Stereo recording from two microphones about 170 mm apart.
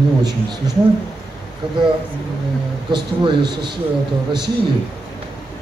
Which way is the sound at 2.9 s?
25° right (ahead or behind).